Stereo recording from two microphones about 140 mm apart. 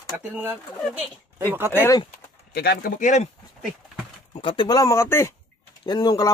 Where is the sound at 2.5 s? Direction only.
90° left; by 3.2 s 65° left (ahead or behind).